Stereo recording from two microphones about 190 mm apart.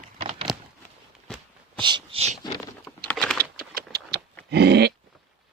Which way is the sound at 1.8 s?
25° right (ahead or behind).